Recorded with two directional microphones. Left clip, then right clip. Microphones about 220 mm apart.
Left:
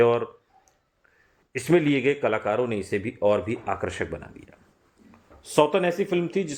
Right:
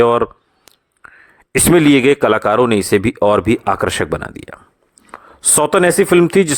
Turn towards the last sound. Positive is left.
turn(degrees=-50)  # may be behind; listen again after turning